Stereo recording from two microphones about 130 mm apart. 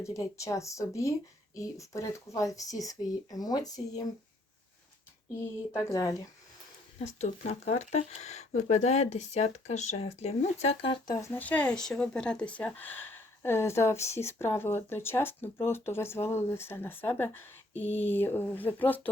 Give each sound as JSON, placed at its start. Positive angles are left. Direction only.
{"t": 0.0, "sound": "speech", "side_deg": 25}
{"t": 5.7, "sound": "speech", "side_deg": 25}
{"t": 7.2, "sound": "speech", "side_deg": 60}
{"t": 11.0, "sound": "speech", "side_deg": 30}
{"t": 11.3, "sound": "speech", "side_deg": 10}